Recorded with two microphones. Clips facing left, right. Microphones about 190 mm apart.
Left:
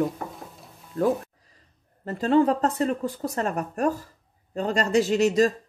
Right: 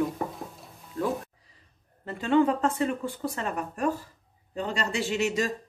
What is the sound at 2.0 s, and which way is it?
Speech, 35° left (ahead or behind).